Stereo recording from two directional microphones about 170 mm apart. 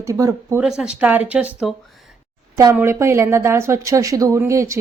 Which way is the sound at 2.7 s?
15° right (ahead or behind).